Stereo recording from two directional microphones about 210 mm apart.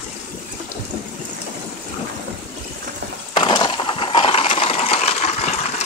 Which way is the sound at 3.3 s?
20° left (ahead or behind).